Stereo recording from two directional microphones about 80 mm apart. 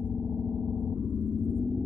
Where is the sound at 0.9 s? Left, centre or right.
Centre.